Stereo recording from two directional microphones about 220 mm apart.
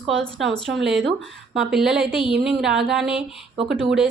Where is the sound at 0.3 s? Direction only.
Centre (ahead or behind).